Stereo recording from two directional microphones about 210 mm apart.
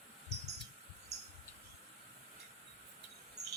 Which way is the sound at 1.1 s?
30° right (ahead or behind).